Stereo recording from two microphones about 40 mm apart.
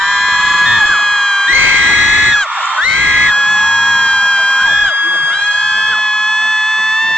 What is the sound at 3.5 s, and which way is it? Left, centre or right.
Music, centre.